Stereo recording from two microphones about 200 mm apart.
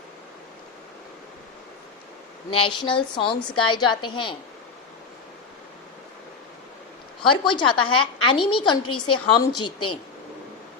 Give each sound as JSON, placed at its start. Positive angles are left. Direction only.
{"t": 2.5, "sound": "a woman's voice", "side_deg": 25}
{"t": 7.2, "sound": "a woman's voice", "side_deg": 25}